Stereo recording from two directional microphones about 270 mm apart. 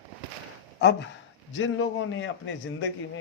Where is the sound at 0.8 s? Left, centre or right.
Left.